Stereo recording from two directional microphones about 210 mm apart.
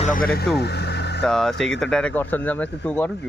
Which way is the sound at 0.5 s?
50° left (ahead or behind).